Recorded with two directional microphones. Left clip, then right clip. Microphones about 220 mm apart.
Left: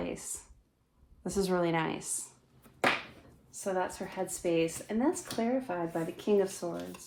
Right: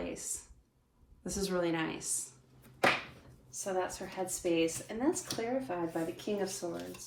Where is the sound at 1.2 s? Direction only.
25° left (ahead or behind).